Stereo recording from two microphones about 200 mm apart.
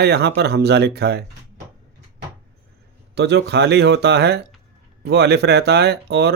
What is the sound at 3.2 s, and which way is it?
Speech, 60° right (ahead or behind).